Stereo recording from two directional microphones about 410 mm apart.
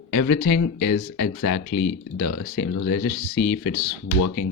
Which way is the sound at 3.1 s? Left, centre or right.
Left.